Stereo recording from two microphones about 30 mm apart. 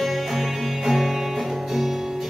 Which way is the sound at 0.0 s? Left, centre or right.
Centre.